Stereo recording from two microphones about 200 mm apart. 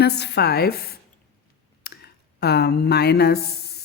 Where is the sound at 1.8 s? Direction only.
55° left (ahead or behind).